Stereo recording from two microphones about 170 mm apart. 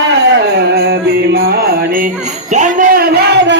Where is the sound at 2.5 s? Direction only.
50° right (ahead or behind); by 3.6 s 80° right.